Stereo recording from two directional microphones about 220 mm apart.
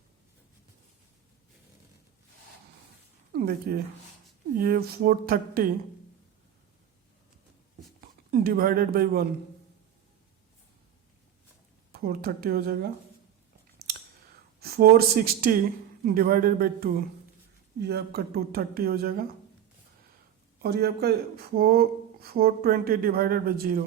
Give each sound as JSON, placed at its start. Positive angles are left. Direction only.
{"t": 3.3, "sound": "speech", "side_deg": -45}
{"t": 8.3, "sound": "speech", "side_deg": -40}
{"t": 11.9, "sound": "speech", "side_deg": -45}
{"t": 14.6, "sound": "speech", "side_deg": -45}
{"t": 20.6, "sound": "speech", "side_deg": -45}